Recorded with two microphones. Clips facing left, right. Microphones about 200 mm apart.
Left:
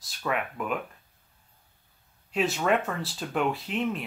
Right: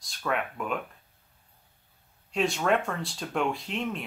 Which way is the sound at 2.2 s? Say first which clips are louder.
Even; 5° left (ahead or behind).